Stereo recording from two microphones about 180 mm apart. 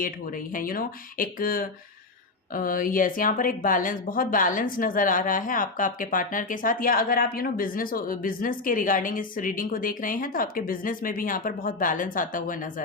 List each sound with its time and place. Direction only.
0.5 s speech: 50° left (ahead or behind)